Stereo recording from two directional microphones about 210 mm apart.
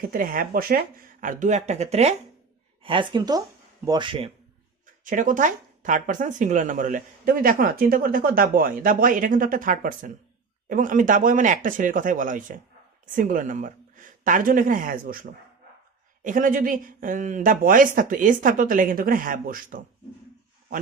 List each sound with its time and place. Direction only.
0.1 s a woman's voice: 45° right (ahead or behind); by 4.3 s 25° right (ahead or behind)
5.0 s speech: 40° right (ahead or behind)